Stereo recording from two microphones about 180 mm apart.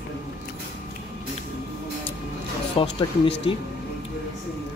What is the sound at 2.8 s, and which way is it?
Speech, 30° left (ahead or behind).